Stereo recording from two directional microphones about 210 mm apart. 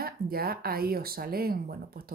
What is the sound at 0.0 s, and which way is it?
Speech, 45° right (ahead or behind).